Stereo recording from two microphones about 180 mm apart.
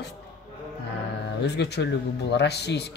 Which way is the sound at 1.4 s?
70° left (ahead or behind).